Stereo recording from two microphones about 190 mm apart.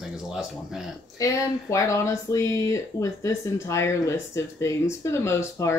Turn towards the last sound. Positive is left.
turn(degrees=15)  # may be behind; listen again after turning